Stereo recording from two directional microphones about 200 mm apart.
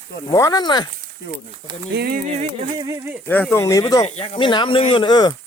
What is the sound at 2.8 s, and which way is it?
Speech, 20° right (ahead or behind).